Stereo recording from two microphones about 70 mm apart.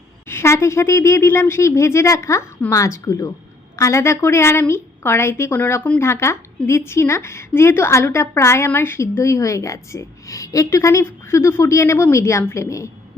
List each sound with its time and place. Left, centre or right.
0.3 s a woman's voice: left